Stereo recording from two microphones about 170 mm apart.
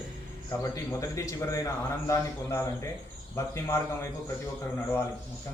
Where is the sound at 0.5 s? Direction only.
15° left (ahead or behind).